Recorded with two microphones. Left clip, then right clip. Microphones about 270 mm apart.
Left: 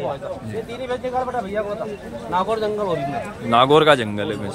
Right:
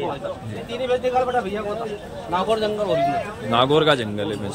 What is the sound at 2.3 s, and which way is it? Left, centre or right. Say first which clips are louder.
Speech: even; centre.